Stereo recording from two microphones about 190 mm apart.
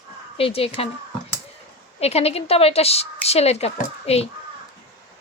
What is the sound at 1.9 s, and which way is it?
Speech, 35° left (ahead or behind).